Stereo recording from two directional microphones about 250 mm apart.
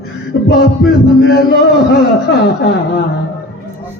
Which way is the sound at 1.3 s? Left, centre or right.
Left.